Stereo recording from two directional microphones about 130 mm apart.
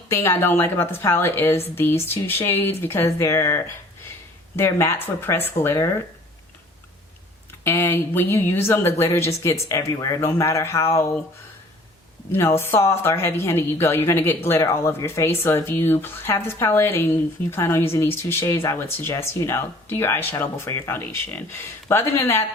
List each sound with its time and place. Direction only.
0.1 s a woman's voice: 20° left (ahead or behind)
7.6 s speech: 20° left (ahead or behind)
12.3 s speech: 20° left (ahead or behind)